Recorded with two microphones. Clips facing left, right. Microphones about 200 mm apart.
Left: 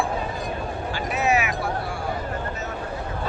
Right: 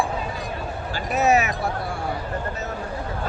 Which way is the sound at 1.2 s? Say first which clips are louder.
Right 3 dB; 40° right (ahead or behind).